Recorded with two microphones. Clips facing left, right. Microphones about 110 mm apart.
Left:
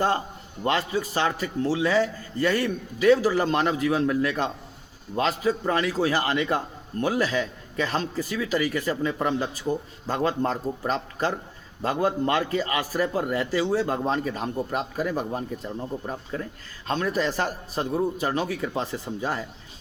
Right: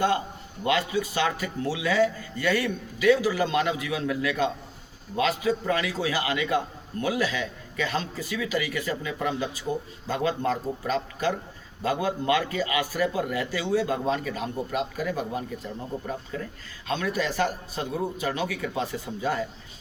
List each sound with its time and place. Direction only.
0.6 s a man's voice: 40° left (ahead or behind)